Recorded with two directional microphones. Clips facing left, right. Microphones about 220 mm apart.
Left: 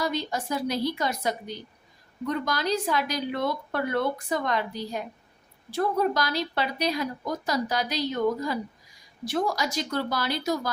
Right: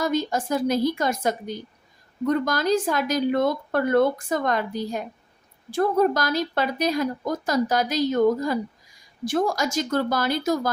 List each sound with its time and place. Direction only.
0.0 s a woman's voice: 45° right (ahead or behind)